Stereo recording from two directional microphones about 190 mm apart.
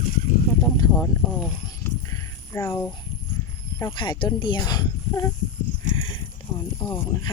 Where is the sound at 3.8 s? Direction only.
25° left (ahead or behind).